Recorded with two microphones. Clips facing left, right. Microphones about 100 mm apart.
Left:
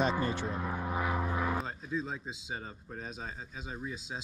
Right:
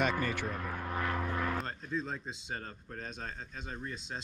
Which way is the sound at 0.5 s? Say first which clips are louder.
Left 3 dB; 15° left (ahead or behind).